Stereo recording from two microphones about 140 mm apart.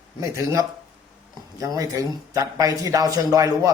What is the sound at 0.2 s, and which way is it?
Speech, 20° right (ahead or behind).